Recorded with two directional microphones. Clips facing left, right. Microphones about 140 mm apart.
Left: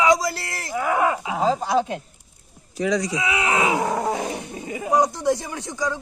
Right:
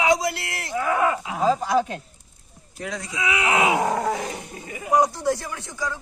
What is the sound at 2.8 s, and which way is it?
Speech, 90° left.